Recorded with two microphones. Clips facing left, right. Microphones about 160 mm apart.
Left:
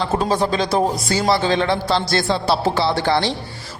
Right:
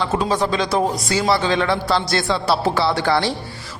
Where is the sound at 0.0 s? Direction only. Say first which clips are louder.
Left 1 dB; 35° left (ahead or behind).